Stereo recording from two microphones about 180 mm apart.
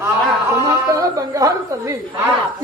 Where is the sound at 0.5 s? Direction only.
15° right (ahead or behind).